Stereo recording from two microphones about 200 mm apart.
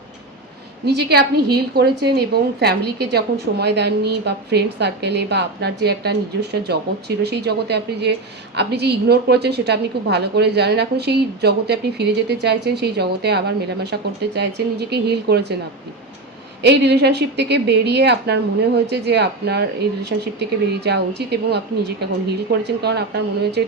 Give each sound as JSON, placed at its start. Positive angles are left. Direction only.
{"t": 0.9, "sound": "a woman's voice", "side_deg": -55}
{"t": 16.6, "sound": "a woman's voice", "side_deg": -55}